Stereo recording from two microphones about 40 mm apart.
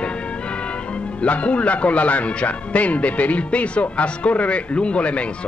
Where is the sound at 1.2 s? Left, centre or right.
Left.